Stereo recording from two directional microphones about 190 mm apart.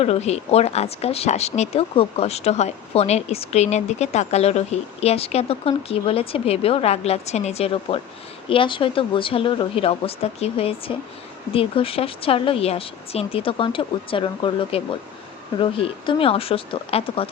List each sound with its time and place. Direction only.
0.0 s speech: 35° left (ahead or behind)